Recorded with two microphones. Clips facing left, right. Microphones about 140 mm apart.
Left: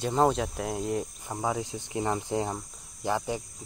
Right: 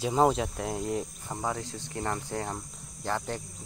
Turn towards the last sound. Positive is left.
turn(degrees=15)  # may be behind; listen again after turning